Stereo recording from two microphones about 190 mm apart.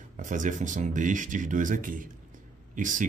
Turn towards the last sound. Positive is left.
turn(degrees=-40)  # may be behind; listen again after turning